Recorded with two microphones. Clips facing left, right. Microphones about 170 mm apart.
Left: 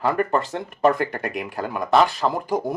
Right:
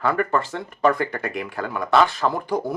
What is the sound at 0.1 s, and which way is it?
Speech, 15° left (ahead or behind).